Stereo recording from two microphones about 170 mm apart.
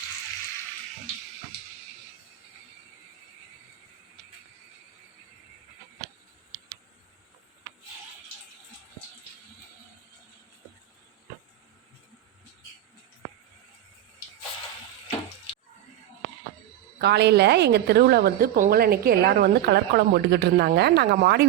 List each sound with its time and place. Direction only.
17.0 s a woman's voice: 80° right